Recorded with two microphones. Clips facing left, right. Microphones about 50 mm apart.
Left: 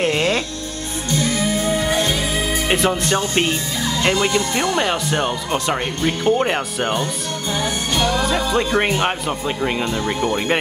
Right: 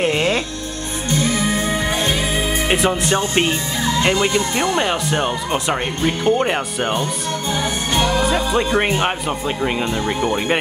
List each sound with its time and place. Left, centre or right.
0.0 s music: centre
1.1 s music: right
2.7 s music: centre
3.2 s speech: centre
7.9 s music: right
8.2 s speech: centre